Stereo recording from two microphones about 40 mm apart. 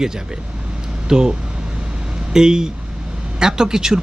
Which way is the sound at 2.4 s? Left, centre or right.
Centre.